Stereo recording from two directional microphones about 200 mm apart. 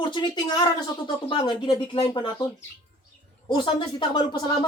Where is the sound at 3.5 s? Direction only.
25° left (ahead or behind).